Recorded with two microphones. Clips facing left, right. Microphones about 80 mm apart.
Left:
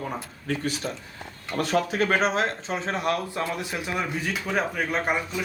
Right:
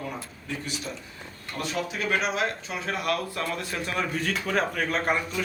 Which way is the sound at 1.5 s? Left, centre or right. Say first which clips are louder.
Left 7 dB; left.